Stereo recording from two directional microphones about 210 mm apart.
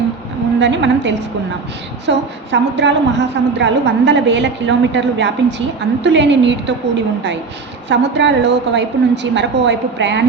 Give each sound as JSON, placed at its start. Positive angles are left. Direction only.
{"t": 0.6, "sound": "a woman's voice", "side_deg": -60}